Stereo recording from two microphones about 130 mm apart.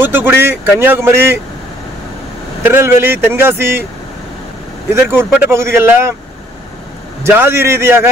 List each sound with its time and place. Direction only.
0.0 s speech: 15° right (ahead or behind)
2.6 s speech: 15° right (ahead or behind)
4.9 s speech: 20° right (ahead or behind)
7.2 s speech: 20° right (ahead or behind)